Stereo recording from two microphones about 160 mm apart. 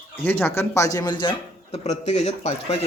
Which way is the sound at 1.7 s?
45° left (ahead or behind).